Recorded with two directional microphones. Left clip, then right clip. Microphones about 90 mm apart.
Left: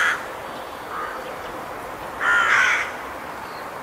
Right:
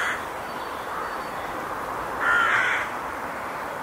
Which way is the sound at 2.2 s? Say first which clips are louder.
Left 4 dB; 10° left (ahead or behind).